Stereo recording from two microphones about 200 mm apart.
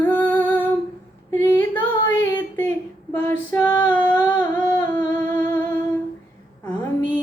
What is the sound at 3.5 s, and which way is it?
Female singing, 20° left (ahead or behind).